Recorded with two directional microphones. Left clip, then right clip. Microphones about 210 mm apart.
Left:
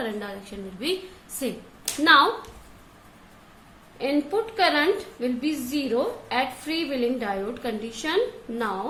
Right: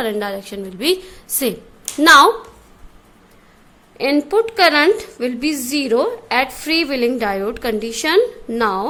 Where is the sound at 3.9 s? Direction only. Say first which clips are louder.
Right 9 dB; 50° right (ahead or behind).